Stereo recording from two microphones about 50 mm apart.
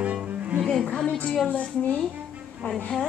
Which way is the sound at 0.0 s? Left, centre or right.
Right.